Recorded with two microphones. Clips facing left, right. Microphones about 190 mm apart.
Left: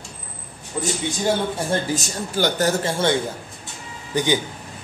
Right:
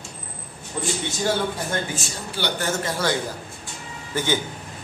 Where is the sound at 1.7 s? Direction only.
40° left (ahead or behind).